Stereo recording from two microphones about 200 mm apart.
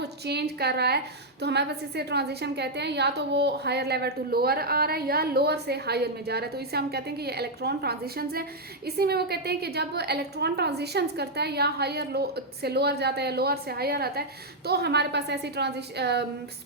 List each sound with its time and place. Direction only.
0.0 s a woman's voice: 55° right (ahead or behind)